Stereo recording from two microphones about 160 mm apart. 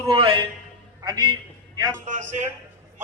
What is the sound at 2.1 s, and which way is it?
Speech, 50° right (ahead or behind).